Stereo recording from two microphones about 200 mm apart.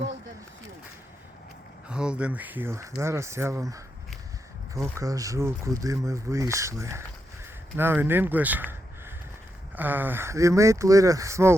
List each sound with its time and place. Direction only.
1.9 s speech: 5° right (ahead or behind)